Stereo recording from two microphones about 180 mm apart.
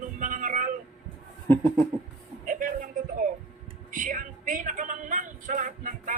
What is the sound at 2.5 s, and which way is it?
A man's voice, 45° right (ahead or behind).